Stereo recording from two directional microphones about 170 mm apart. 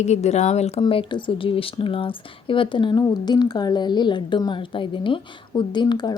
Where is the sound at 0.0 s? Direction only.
40° left (ahead or behind).